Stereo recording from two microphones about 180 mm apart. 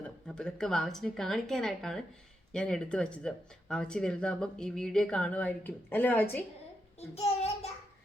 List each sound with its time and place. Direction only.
0.3 s speech: 5° left (ahead or behind)
7.2 s child singing: 35° left (ahead or behind)